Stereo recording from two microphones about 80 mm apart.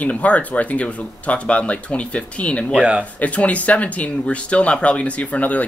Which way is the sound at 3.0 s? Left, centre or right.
Centre.